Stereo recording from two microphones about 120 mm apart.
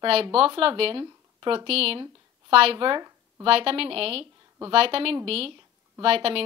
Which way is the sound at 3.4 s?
50° right (ahead or behind).